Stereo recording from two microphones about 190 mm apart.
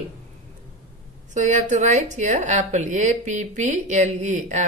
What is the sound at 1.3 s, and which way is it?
Speech, 40° right (ahead or behind).